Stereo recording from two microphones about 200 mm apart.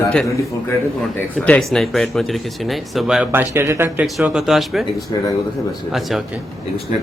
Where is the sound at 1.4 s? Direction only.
5° left (ahead or behind).